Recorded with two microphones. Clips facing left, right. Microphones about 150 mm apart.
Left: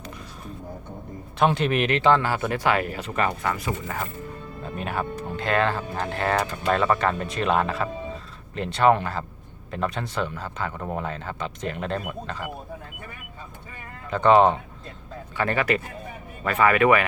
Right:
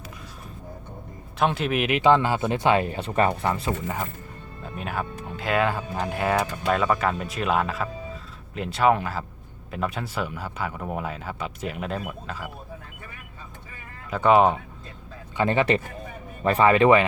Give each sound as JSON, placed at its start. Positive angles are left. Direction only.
{"t": 1.4, "sound": "speech", "side_deg": 0}
{"t": 4.6, "sound": "speech", "side_deg": 0}
{"t": 14.1, "sound": "speech", "side_deg": -10}
{"t": 15.4, "sound": "speech", "side_deg": -25}